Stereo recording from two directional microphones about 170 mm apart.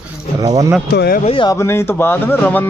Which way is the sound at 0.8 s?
65° left (ahead or behind).